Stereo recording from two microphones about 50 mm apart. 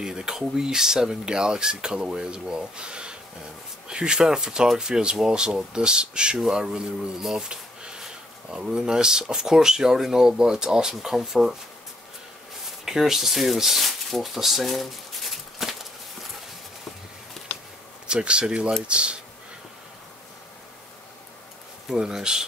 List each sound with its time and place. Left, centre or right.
0.0 s speech: centre
12.8 s speech: centre
18.0 s speech: right
21.9 s speech: centre